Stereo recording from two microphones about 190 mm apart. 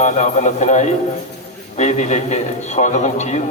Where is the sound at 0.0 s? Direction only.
40° left (ahead or behind).